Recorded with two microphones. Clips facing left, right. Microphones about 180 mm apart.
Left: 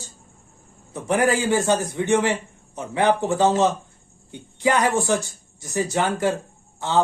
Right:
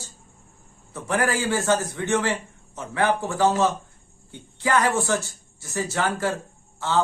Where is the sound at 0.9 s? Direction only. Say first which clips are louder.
Left 4 dB; 20° left (ahead or behind).